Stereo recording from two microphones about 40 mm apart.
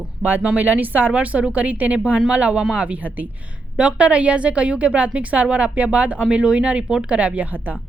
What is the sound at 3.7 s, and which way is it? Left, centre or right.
Speech, right.